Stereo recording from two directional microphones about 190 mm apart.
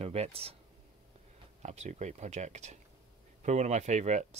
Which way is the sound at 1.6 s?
35° right (ahead or behind).